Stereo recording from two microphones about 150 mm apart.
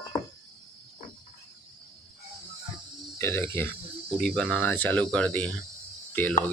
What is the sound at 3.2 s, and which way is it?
Speech, 15° left (ahead or behind).